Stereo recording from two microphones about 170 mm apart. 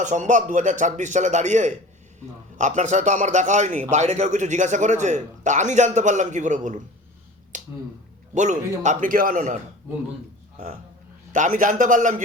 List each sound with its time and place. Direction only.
0.0 s a man's voice: 45° right (ahead or behind)
7.5 s finger snapping: 45° right (ahead or behind)
8.4 s a man's voice: 45° right (ahead or behind)
11.3 s a man's voice: 45° right (ahead or behind)